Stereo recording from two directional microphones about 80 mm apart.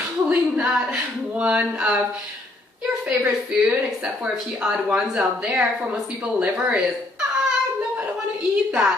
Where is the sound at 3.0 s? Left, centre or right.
Centre.